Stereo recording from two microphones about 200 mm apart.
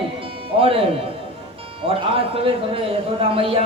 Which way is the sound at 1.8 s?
25° right (ahead or behind).